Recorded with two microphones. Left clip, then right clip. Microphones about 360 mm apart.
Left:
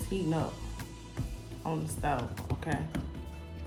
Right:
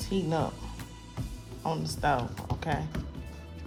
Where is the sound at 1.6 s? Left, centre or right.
Right.